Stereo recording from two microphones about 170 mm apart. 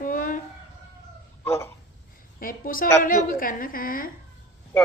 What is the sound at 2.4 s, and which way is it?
A woman's voice, 55° left (ahead or behind).